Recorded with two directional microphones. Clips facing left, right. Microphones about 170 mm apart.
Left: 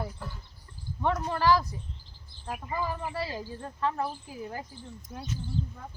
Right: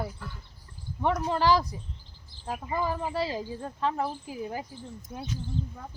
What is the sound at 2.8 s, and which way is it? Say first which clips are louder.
Speech: right 5 dB; 20° right (ahead or behind).